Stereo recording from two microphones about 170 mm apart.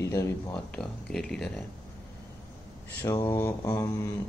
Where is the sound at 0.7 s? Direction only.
5° left (ahead or behind).